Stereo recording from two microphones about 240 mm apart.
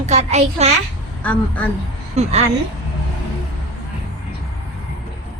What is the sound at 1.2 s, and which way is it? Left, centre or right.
Speech, centre.